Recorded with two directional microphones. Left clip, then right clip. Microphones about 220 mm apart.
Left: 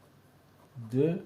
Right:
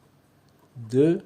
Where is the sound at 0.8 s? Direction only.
55° right (ahead or behind).